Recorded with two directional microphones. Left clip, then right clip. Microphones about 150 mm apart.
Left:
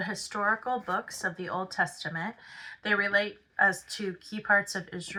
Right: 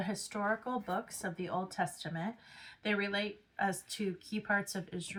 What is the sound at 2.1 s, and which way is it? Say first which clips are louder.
Speech: left 6 dB; 10° right (ahead or behind).